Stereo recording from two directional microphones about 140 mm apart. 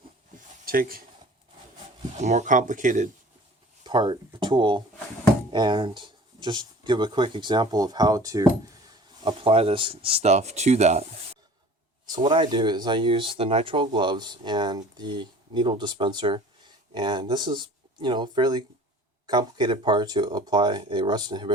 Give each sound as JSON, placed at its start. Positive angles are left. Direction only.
{"t": 0.6, "sound": "speech", "side_deg": -90}
{"t": 2.1, "sound": "speech", "side_deg": -55}
{"t": 3.8, "sound": "speech", "side_deg": -35}
{"t": 9.2, "sound": "speech", "side_deg": -40}
{"t": 12.0, "sound": "speech", "side_deg": -35}